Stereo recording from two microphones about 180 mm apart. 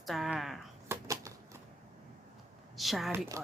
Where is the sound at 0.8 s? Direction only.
15° right (ahead or behind).